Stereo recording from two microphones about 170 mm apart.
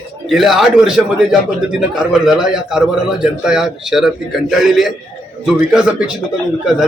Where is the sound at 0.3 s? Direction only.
Centre (ahead or behind).